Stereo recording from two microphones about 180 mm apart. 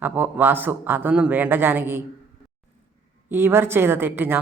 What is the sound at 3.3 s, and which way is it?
Speech, 15° right (ahead or behind).